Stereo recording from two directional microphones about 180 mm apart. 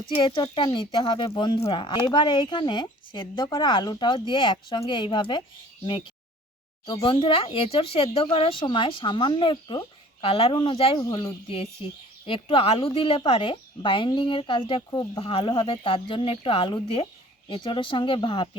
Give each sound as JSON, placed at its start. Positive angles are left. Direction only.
{"t": 0.1, "sound": "a woman's voice", "side_deg": 25}